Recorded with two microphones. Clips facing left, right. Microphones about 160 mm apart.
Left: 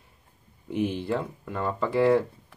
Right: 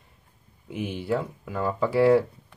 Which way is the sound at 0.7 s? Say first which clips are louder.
Left 1 dB; 5° right (ahead or behind).